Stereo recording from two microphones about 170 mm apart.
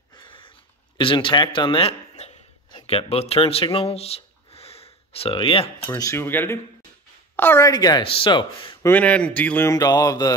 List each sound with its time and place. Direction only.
0.1 s a sound: 30° left (ahead or behind)
2.7 s speech: 35° left (ahead or behind)
5.8 s a woman's voice: 15° left (ahead or behind)
8.8 s speech: 10° left (ahead or behind)